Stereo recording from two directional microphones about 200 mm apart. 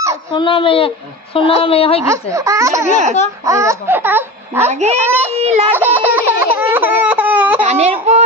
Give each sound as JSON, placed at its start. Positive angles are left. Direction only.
{"t": 0.3, "sound": "a woman's voice", "side_deg": 25}
{"t": 2.0, "sound": "speech", "side_deg": -15}
{"t": 4.6, "sound": "a child's voice", "side_deg": -35}
{"t": 5.0, "sound": "speech", "side_deg": -10}
{"t": 5.3, "sound": "a child's voice", "side_deg": -30}
{"t": 5.7, "sound": "speech", "side_deg": -10}
{"t": 6.4, "sound": "a sound", "side_deg": -10}
{"t": 7.6, "sound": "baby cry", "side_deg": -30}